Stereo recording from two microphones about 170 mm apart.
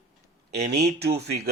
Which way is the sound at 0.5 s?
70° right (ahead or behind).